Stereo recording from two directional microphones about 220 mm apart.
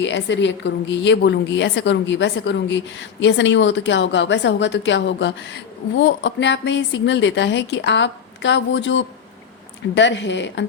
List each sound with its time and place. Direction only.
0.0 s a woman's voice: 55° left (ahead or behind)